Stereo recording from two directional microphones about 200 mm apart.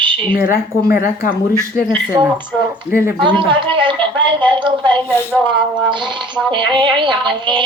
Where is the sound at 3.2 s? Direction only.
25° right (ahead or behind).